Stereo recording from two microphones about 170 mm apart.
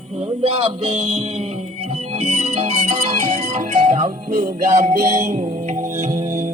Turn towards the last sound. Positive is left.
turn(degrees=-50)  # may be behind; listen again after turning